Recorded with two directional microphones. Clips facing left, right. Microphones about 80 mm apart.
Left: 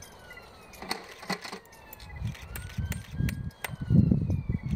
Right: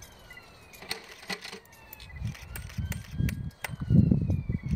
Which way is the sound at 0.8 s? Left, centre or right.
Left.